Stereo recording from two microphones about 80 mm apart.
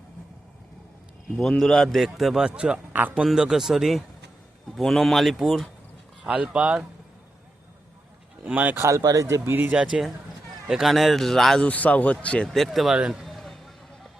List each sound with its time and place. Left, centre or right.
1.4 s a man's voice: centre
6.2 s speech: centre
8.4 s speech: right
9.0 s speech: right
9.2 s speech: right
9.6 s speech: centre
9.8 s a man's voice: centre
11.6 s a man's voice: centre
12.5 s speech: centre